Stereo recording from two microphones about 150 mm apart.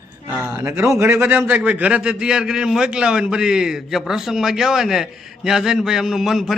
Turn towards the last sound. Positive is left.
turn(degrees=0)  # may be behind; listen again after turning